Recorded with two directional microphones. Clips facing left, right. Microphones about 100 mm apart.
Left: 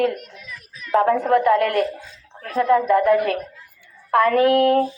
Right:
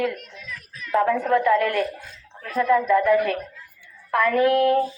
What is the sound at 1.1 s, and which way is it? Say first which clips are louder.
Speech: left 3 dB; 25° left (ahead or behind).